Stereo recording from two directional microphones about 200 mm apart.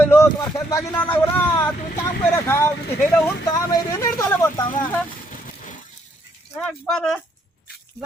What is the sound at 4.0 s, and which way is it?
Speech, 15° left (ahead or behind).